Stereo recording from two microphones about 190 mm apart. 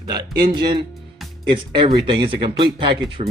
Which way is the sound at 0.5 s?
25° right (ahead or behind).